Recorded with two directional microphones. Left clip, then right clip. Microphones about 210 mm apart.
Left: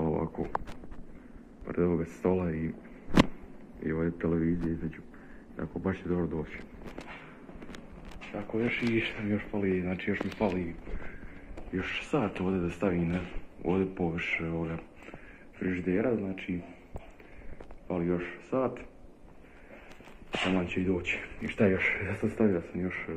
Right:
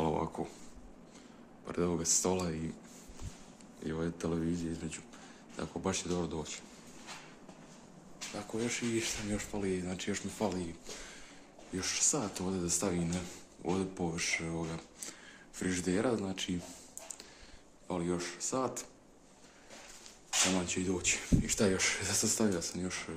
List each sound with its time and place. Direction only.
0.0 s a sound: 20° right (ahead or behind)
1.7 s speech: 15° right (ahead or behind)
3.8 s speech: 15° right (ahead or behind)
8.4 s speech: 15° right (ahead or behind)
11.7 s speech: 15° right (ahead or behind)
15.6 s speech: 35° right (ahead or behind)
17.8 s speech: 20° right (ahead or behind)
20.5 s speech: 20° right (ahead or behind)